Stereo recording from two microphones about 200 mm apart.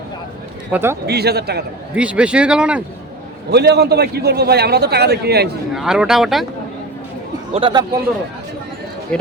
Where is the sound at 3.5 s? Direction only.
55° right (ahead or behind).